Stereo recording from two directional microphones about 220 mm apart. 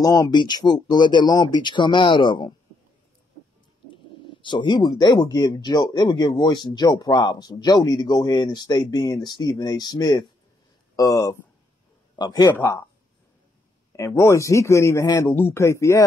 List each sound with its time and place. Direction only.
0.0 s speech: 15° left (ahead or behind)
3.9 s speech: 25° left (ahead or behind)
13.9 s speech: 15° left (ahead or behind)